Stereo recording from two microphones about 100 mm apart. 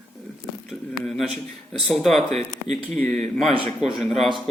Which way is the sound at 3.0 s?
15° left (ahead or behind).